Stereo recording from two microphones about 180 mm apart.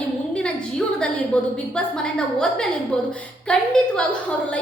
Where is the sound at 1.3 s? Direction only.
5° left (ahead or behind).